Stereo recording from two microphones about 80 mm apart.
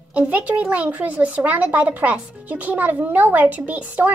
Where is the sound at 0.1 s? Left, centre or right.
Centre.